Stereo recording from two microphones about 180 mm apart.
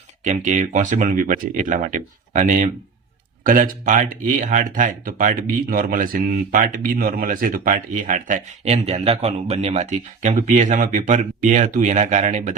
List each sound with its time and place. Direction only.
0.3 s speech: 45° right (ahead or behind)